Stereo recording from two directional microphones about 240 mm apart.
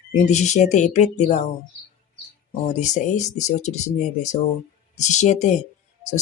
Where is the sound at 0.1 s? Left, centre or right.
Left.